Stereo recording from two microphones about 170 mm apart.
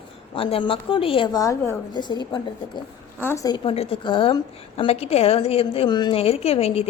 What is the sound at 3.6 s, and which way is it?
A woman's voice, 35° left (ahead or behind).